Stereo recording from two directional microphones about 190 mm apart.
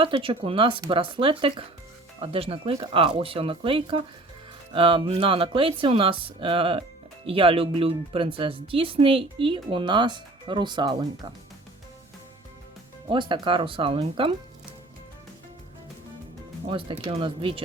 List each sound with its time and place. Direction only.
0.0 s speech: 30° right (ahead or behind)
13.1 s speech: 25° right (ahead or behind)
16.6 s speech: 30° right (ahead or behind)